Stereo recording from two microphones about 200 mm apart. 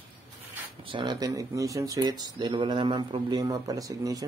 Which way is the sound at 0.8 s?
20° right (ahead or behind).